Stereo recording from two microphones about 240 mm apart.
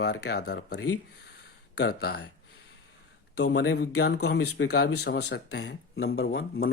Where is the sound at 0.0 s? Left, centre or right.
Left.